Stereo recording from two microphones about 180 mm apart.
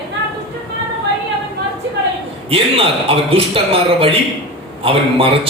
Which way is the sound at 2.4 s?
30° right (ahead or behind).